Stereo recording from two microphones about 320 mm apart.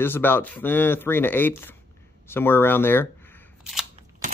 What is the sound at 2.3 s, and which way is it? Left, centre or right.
Single-lens reflex camera, centre.